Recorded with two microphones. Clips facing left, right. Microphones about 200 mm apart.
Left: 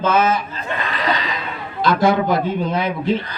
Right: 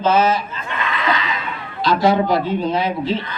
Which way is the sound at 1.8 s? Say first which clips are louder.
Even; 50° left (ahead or behind).